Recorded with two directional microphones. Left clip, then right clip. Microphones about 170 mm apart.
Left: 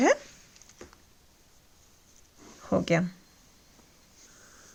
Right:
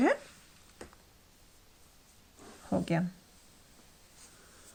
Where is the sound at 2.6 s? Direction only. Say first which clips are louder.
Left 7 dB; 40° left (ahead or behind).